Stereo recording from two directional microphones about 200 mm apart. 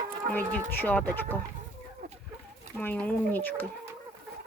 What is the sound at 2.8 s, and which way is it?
Speech, 10° left (ahead or behind).